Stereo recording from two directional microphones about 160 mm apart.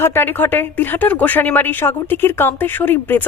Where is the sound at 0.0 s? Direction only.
15° left (ahead or behind).